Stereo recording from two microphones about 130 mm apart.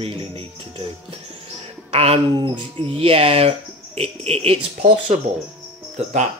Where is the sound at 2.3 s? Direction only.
35° right (ahead or behind).